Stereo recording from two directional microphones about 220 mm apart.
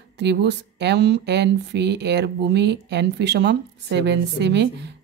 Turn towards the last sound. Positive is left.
turn(degrees=-50)  # may be behind; listen again after turning